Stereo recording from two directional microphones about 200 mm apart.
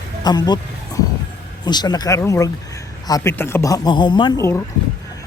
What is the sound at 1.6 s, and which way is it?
Speech, 20° left (ahead or behind).